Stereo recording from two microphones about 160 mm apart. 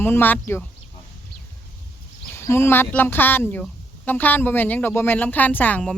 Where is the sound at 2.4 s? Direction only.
15° left (ahead or behind).